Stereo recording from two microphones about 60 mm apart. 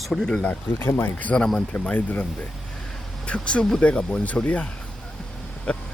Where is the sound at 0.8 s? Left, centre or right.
Left.